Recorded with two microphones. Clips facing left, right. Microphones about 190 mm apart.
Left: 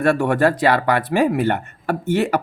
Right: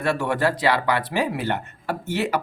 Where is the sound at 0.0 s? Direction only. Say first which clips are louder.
Left 6 dB; 50° left (ahead or behind).